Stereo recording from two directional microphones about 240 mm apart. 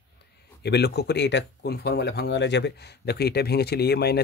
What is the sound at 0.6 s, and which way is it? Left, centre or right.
Speech, left.